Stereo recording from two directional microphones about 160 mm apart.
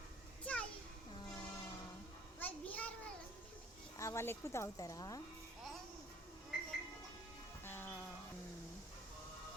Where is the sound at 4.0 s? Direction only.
15° left (ahead or behind).